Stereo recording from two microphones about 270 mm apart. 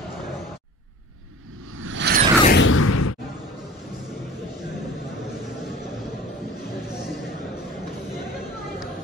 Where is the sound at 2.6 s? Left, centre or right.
Left.